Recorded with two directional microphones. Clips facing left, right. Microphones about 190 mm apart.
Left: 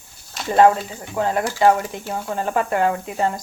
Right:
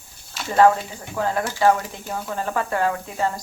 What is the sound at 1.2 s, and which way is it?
Speech, 20° left (ahead or behind).